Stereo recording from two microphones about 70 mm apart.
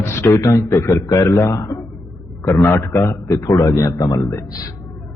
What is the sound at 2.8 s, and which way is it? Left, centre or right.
A man's voice, left.